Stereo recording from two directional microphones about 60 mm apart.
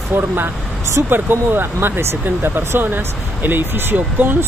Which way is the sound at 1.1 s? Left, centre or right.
Right.